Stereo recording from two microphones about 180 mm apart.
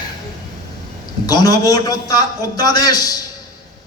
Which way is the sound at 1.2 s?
20° left (ahead or behind).